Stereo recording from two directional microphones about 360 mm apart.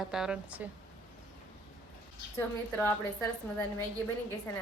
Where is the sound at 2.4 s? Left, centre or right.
Centre.